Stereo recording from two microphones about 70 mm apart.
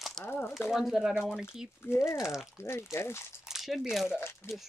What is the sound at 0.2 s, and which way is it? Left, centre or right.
Speech, left.